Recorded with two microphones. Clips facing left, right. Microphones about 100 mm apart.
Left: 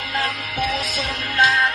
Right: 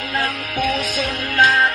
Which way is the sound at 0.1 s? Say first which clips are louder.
Right 2 dB; 50° right (ahead or behind).